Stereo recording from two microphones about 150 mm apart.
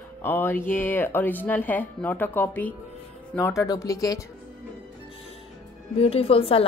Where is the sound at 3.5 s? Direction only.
20° left (ahead or behind).